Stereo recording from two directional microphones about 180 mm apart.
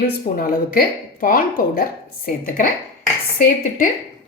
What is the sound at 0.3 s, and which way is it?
Speech, 55° left (ahead or behind).